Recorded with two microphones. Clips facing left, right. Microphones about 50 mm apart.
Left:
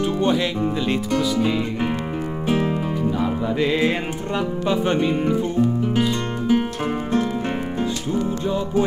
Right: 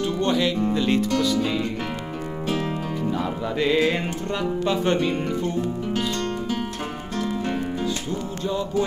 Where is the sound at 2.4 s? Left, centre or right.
Left.